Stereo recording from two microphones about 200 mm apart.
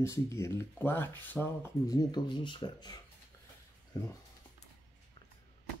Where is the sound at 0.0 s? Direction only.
15° left (ahead or behind).